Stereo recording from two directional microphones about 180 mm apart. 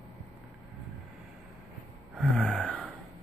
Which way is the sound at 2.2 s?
5° left (ahead or behind).